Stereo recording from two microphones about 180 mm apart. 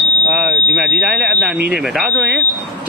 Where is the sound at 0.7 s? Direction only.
Centre (ahead or behind).